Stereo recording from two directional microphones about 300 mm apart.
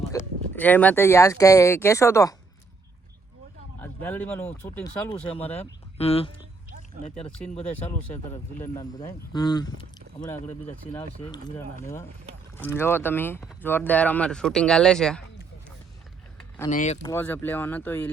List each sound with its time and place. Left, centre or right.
0.1 s a sound: centre
0.5 s speech: centre
3.8 s speech: centre
5.3 s speech: centre
8.5 s speech: centre
11.3 s speech: centre
16.6 s speech: left
17.0 s speech: centre